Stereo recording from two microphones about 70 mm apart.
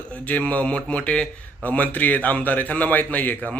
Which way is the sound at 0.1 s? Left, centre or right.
Centre.